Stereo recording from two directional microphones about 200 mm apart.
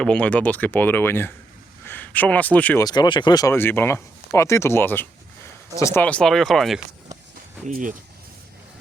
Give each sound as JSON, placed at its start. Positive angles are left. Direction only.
{"t": 0.0, "sound": "speech", "side_deg": 5}
{"t": 2.8, "sound": "speech", "side_deg": 20}
{"t": 7.7, "sound": "speech", "side_deg": -40}